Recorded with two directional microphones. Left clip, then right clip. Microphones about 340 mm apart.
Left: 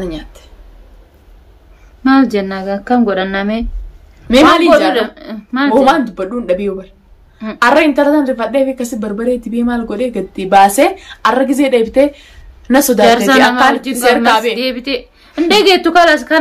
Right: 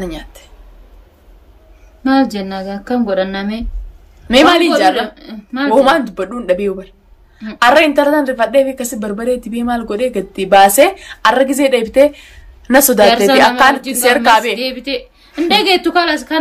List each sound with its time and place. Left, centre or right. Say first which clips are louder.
0.0 s a woman's voice: left 2 dB; centre
2.0 s a woman's voice: left 3 dB; centre
4.3 s a woman's voice: left 2 dB; centre
4.9 s a woman's voice: left 3 dB; centre
5.9 s a woman's voice: left 1 dB; centre
13.1 s a woman's voice: left 1 dB; centre
13.4 s a woman's voice: even; centre
13.7 s a woman's voice: left 2 dB; centre
14.0 s a woman's voice: even; centre
14.6 s a woman's voice: left 2 dB; centre